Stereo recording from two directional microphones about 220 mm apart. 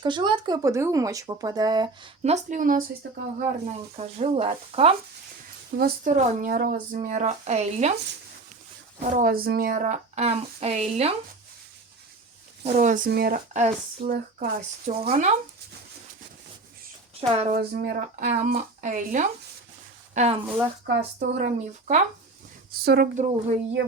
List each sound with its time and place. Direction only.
0.0 s speech: 20° right (ahead or behind)
5.7 s speech: 40° right (ahead or behind)
9.0 s speech: 35° right (ahead or behind)
12.6 s speech: 35° right (ahead or behind)
17.2 s speech: 25° right (ahead or behind)
17.5 s speech: 40° right (ahead or behind)
20.8 s speech: 40° right (ahead or behind)
22.7 s speech: 45° right (ahead or behind)